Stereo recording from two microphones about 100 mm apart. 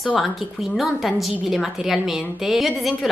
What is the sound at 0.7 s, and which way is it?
A woman's voice, centre (ahead or behind).